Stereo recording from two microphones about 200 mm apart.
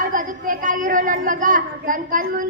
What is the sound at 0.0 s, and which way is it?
A woman's voice, 45° right (ahead or behind).